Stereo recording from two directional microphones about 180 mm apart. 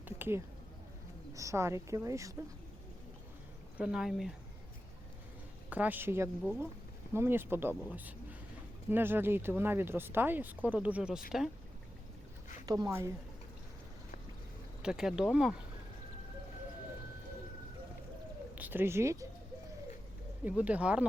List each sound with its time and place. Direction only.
0.0 s a sound: 15° right (ahead or behind)
1.3 s speech: 15° right (ahead or behind)
3.8 s speech: 5° right (ahead or behind)
5.7 s speech: 10° right (ahead or behind)
12.6 s speech: 20° right (ahead or behind)
14.8 s speech: 5° right (ahead or behind)
18.5 s speech: 10° right (ahead or behind)
20.4 s speech: 10° right (ahead or behind)